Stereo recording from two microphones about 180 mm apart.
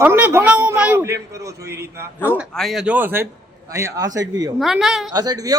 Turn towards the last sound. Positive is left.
turn(degrees=-20)  # may be behind; listen again after turning